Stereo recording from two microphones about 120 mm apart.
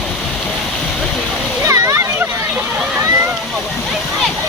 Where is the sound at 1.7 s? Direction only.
25° right (ahead or behind).